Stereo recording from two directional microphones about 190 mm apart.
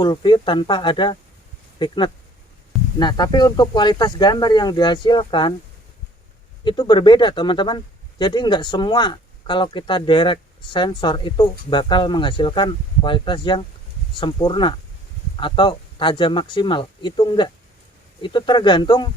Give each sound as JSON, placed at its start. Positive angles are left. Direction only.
{"t": 0.0, "sound": "speech", "side_deg": 25}
{"t": 3.0, "sound": "speech", "side_deg": 20}
{"t": 6.7, "sound": "speech", "side_deg": 20}